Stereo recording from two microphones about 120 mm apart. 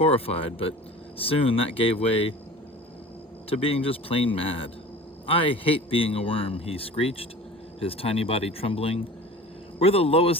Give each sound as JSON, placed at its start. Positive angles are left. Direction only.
{"t": 0.0, "sound": "a man's voice", "side_deg": 55}
{"t": 3.5, "sound": "a man's voice", "side_deg": 50}